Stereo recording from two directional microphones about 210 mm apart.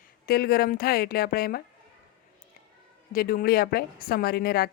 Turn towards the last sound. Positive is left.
turn(degrees=45)  # may be behind; listen again after turning